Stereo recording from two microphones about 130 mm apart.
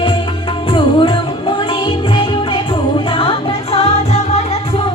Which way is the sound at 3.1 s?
50° left (ahead or behind).